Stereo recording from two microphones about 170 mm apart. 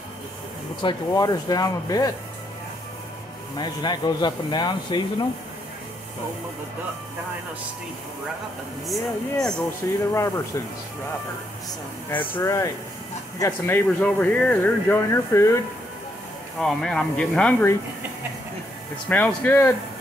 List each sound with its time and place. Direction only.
0.8 s speech: 20° left (ahead or behind)
3.5 s speech: 25° left (ahead or behind)
8.8 s speech: centre (ahead or behind)
9.8 s speech: 15° left (ahead or behind)
12.4 s speech: 15° left (ahead or behind)
16.5 s speech: 5° left (ahead or behind)
19.0 s speech: 10° left (ahead or behind)